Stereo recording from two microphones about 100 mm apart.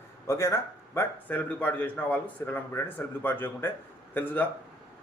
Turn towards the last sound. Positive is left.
turn(degrees=15)  # may be behind; listen again after turning